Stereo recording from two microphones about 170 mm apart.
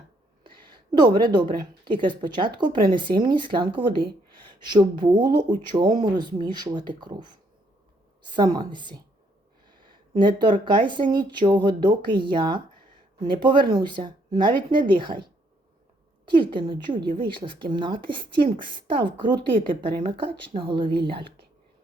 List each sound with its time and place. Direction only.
1.0 s speech: 25° right (ahead or behind)
8.4 s speech: 25° right (ahead or behind)
10.2 s speech: 25° right (ahead or behind)
16.4 s speech: 30° right (ahead or behind)